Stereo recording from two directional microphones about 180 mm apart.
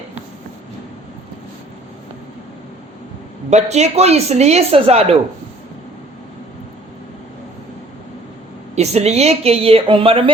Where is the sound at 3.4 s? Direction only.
40° right (ahead or behind).